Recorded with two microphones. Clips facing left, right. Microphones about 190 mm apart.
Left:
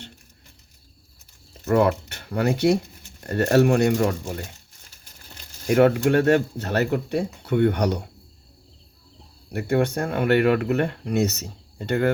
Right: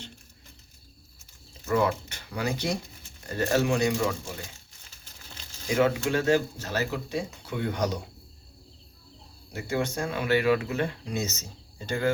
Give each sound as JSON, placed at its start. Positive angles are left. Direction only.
{"t": 1.6, "sound": "speech", "side_deg": 60}
{"t": 5.6, "sound": "speech", "side_deg": 60}
{"t": 9.5, "sound": "speech", "side_deg": 60}